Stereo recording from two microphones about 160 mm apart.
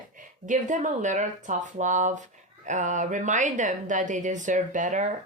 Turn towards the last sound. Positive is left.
turn(degrees=-50)  # may be behind; listen again after turning